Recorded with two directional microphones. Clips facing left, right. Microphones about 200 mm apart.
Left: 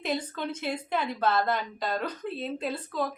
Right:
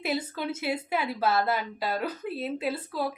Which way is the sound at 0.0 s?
5° right (ahead or behind).